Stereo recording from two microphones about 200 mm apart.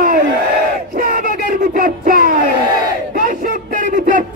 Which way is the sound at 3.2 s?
40° right (ahead or behind).